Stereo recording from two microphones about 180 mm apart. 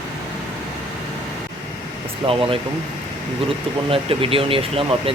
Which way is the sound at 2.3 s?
30° right (ahead or behind).